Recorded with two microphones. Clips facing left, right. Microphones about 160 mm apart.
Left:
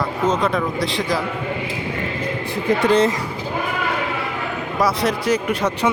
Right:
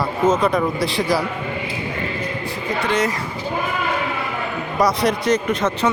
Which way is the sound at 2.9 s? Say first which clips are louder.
Left 4 dB; 30° left (ahead or behind).